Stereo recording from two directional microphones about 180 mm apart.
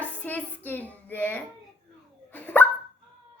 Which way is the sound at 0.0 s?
10° left (ahead or behind).